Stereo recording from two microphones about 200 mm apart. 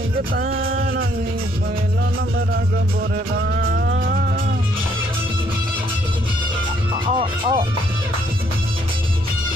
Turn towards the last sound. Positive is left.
turn(degrees=-30)  # may be behind; listen again after turning